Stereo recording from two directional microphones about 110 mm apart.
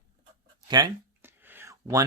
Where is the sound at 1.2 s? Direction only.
20° right (ahead or behind).